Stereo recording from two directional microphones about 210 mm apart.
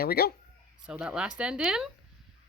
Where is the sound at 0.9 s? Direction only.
5° right (ahead or behind).